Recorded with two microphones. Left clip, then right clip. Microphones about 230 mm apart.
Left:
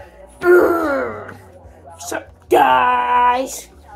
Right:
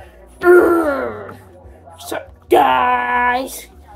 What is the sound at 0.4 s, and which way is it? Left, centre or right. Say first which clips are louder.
Wail: right 2 dB; right.